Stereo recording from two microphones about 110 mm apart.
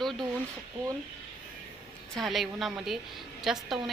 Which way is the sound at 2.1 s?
Centre (ahead or behind).